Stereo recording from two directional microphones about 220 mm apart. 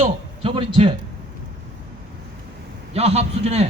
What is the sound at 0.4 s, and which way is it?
Speech, 25° right (ahead or behind).